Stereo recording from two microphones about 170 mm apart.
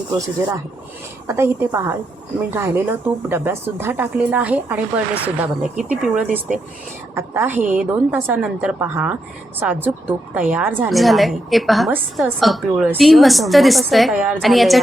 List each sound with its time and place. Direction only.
1.3 s a woman's voice: 15° right (ahead or behind)